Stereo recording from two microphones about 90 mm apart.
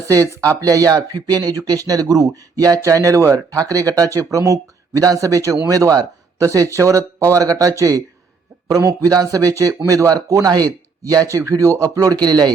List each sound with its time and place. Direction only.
0.3 s a man's voice: 40° right (ahead or behind)